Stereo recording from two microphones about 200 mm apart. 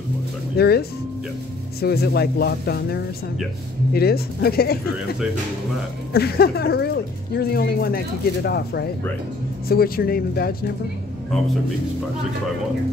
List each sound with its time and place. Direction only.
0.6 s speech: 55° left (ahead or behind)
6.1 s speech: 50° left (ahead or behind)